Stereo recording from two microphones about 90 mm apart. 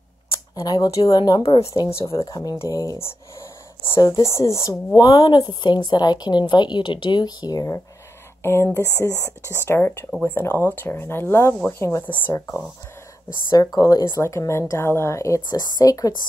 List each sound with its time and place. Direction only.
0.6 s a woman's voice: 50° left (ahead or behind)
1.4 s a woman's voice: 90° left
2.2 s a woman's voice: 45° left (ahead or behind)
4.9 s a woman's voice: 45° left (ahead or behind)
8.4 s speech: 30° left (ahead or behind)
9.1 s speech: 25° right (ahead or behind)
9.7 s speech: 25° left (ahead or behind)
13.5 s a woman's voice: 45° left (ahead or behind)
15.5 s a woman's voice: 45° left (ahead or behind)